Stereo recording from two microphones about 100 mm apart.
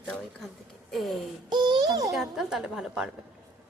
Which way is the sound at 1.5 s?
50° right (ahead or behind).